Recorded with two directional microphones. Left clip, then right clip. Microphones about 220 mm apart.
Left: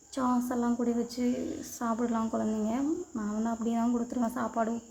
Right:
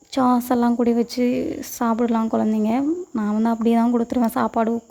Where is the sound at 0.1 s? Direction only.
35° right (ahead or behind).